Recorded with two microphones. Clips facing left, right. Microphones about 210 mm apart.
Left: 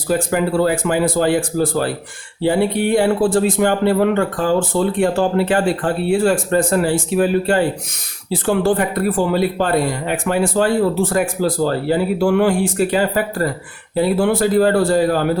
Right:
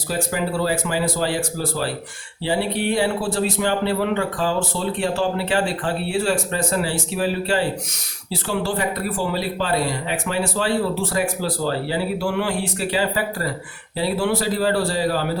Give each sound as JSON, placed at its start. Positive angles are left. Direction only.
{"t": 0.1, "sound": "speech", "side_deg": 55}